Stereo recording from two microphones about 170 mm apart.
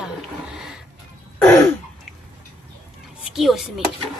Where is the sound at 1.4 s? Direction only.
15° left (ahead or behind).